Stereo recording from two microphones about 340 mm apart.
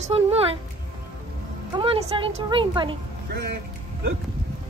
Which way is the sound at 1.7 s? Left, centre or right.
Centre.